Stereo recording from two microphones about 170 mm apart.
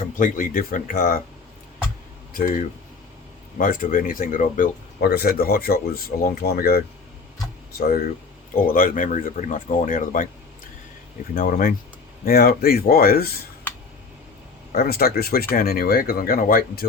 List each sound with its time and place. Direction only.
0.0 s speech: 50° left (ahead or behind)
2.3 s speech: 55° left (ahead or behind)
11.3 s speech: 55° left (ahead or behind)
14.7 s speech: 60° left (ahead or behind)